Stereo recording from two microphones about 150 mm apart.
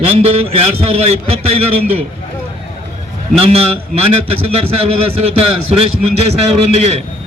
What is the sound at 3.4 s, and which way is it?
Speech, 40° right (ahead or behind).